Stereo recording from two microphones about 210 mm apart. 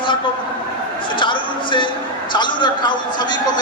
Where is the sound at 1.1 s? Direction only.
25° left (ahead or behind).